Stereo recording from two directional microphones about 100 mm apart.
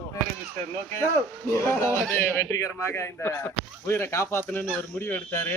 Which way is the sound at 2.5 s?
35° left (ahead or behind).